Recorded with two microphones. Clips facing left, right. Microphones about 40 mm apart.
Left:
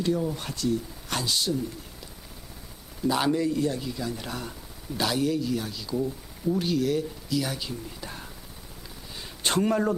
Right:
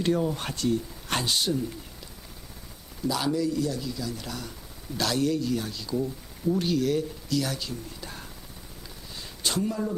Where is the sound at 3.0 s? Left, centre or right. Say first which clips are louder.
Left 2 dB; left.